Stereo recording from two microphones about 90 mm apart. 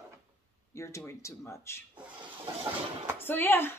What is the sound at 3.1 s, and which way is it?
Speech, 25° left (ahead or behind).